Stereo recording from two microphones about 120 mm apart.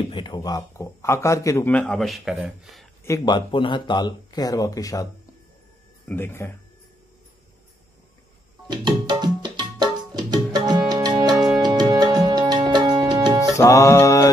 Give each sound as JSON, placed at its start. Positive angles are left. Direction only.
{"t": 0.1, "sound": "a man's voice", "side_deg": 40}
{"t": 1.7, "sound": "speech", "side_deg": 10}
{"t": 3.3, "sound": "speech", "side_deg": 40}
{"t": 6.0, "sound": "speech", "side_deg": 20}
{"t": 8.6, "sound": "tabla", "side_deg": -35}
{"t": 12.6, "sound": "music", "side_deg": -40}
{"t": 13.6, "sound": "music", "side_deg": 25}